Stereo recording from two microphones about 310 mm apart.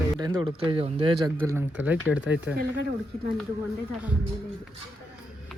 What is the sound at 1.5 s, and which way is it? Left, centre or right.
Speech, centre.